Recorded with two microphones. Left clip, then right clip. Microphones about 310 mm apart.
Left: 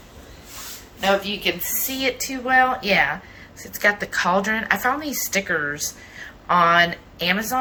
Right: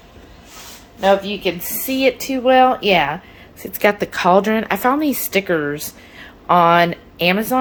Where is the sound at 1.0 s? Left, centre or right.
Right.